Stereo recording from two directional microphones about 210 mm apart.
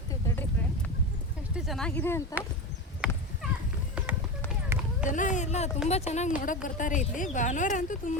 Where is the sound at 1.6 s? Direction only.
Centre (ahead or behind).